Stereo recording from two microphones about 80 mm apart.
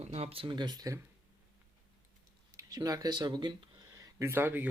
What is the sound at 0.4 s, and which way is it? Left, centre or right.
Speech, right.